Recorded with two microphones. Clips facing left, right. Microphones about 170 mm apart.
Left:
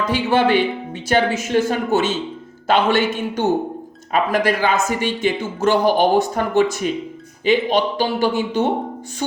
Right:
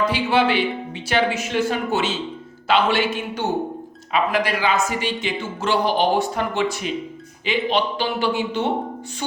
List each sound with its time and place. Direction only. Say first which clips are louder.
0.0 s speech: left 2 dB; 45° left (ahead or behind)